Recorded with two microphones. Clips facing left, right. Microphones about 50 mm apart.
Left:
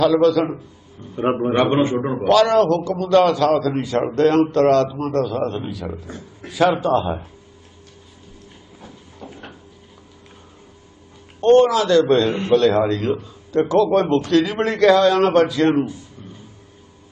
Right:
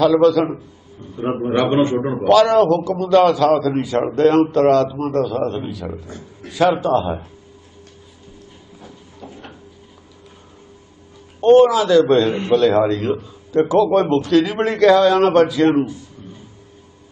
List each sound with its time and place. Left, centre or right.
0.0 s a man's voice: centre
1.2 s a man's voice: left
1.5 s a man's voice: centre
9.2 s a sound: centre
11.4 s a man's voice: centre